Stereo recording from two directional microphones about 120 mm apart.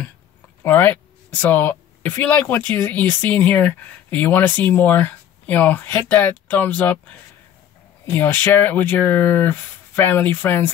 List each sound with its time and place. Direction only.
0.7 s speech: 15° left (ahead or behind)